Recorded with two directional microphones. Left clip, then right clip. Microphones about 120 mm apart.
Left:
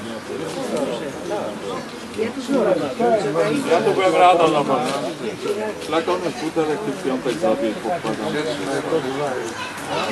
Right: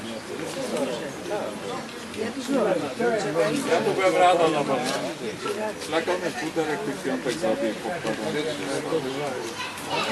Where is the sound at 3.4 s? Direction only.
15° right (ahead or behind).